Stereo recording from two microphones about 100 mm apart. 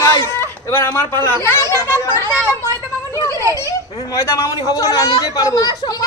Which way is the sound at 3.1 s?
30° left (ahead or behind).